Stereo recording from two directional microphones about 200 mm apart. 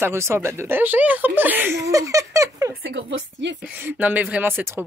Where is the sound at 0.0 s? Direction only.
15° right (ahead or behind).